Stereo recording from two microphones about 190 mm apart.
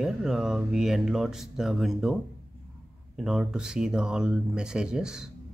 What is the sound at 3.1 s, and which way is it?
Speech, centre (ahead or behind).